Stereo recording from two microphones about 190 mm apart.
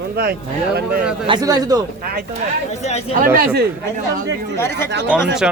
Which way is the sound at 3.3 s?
55° right (ahead or behind).